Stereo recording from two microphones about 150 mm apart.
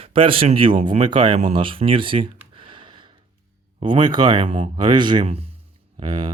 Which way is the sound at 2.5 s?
35° right (ahead or behind).